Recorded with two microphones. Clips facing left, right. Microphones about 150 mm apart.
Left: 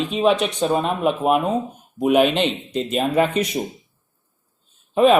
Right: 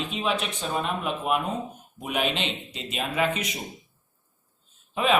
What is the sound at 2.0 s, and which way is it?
Speech, 60° left (ahead or behind).